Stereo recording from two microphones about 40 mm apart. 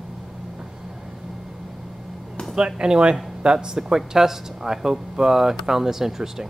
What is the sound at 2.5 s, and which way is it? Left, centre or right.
Speech, right.